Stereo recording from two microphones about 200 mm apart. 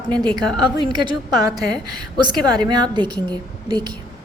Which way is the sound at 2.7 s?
20° right (ahead or behind).